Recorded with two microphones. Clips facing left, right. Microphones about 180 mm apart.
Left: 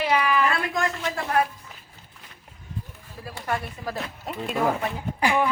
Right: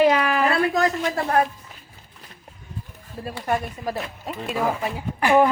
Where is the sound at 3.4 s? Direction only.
20° right (ahead or behind).